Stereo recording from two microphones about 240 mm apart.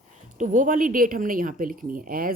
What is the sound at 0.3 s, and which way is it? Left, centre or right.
Speech, right.